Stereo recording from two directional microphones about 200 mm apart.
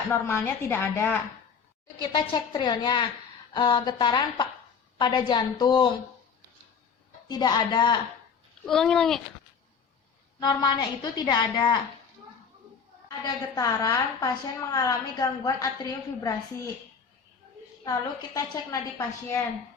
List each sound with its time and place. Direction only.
0.1 s a woman's voice: 10° left (ahead or behind)
2.0 s a woman's voice: 20° left (ahead or behind)
7.3 s a woman's voice: 20° left (ahead or behind)
8.6 s a child's voice: centre (ahead or behind)
10.4 s a woman's voice: 20° left (ahead or behind)
13.2 s a woman's voice: 15° left (ahead or behind)
18.3 s a woman's voice: 15° left (ahead or behind)